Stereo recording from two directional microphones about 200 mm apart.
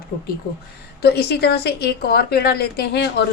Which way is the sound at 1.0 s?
55° left (ahead or behind).